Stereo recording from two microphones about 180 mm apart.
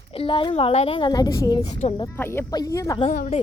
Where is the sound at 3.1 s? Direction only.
40° left (ahead or behind).